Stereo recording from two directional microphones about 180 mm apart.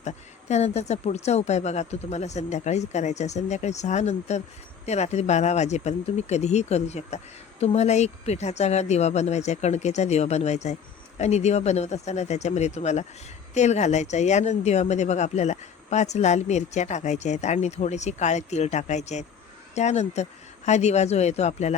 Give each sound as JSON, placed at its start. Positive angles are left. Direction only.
{"t": 0.0, "sound": "speech", "side_deg": 40}